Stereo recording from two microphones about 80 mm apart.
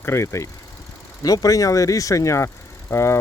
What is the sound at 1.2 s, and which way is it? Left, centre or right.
Speech, left.